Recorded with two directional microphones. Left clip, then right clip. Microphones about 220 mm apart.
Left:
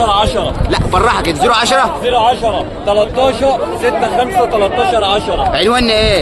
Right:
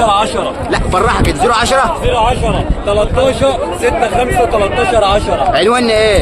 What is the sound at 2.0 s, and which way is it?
A man's voice, 5° right (ahead or behind).